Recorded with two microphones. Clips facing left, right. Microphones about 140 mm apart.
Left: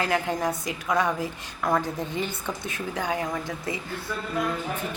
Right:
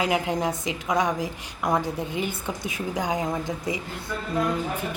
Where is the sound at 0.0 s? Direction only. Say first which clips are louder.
Right 1 dB; 15° right (ahead or behind).